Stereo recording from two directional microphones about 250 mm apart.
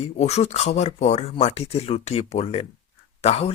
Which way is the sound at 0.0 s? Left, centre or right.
Left.